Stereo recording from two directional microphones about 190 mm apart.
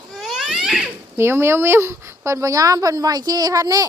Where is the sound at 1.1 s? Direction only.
15° right (ahead or behind).